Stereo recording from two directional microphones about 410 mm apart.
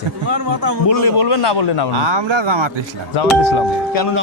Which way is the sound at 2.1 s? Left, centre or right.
Right.